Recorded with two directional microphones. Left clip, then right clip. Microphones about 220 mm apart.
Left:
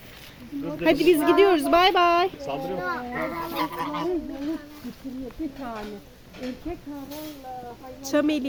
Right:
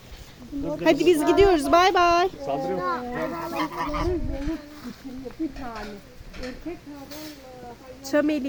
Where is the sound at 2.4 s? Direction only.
30° right (ahead or behind).